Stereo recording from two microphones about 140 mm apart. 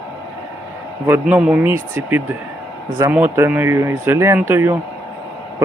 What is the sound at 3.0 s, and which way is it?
Speech, 15° right (ahead or behind).